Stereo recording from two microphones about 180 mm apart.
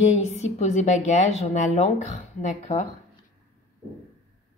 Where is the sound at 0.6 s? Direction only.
40° left (ahead or behind).